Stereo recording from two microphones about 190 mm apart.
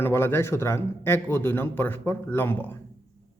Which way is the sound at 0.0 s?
10° left (ahead or behind).